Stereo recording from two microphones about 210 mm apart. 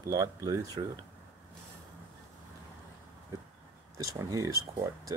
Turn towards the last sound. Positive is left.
turn(degrees=-15)  # may be behind; listen again after turning